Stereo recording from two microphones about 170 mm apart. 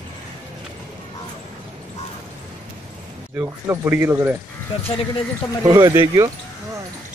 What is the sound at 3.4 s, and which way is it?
Speech, 15° right (ahead or behind).